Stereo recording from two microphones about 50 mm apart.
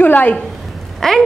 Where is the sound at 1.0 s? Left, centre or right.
Centre.